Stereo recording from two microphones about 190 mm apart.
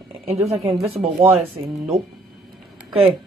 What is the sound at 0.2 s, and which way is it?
Speech, 30° right (ahead or behind).